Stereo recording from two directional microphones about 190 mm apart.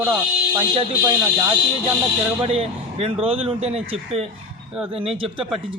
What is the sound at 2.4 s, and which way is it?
Speech, 30° right (ahead or behind).